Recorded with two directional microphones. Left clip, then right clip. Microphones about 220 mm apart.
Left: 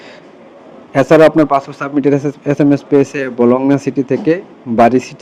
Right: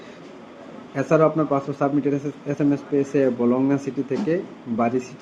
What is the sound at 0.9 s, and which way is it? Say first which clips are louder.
Speech: left 11 dB; 40° left (ahead or behind).